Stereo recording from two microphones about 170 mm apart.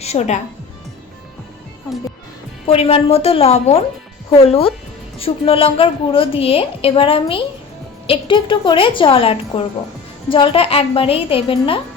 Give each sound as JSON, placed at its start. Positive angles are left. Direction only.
{"t": 0.0, "sound": "a woman's voice", "side_deg": 40}
{"t": 2.6, "sound": "a woman's voice", "side_deg": 35}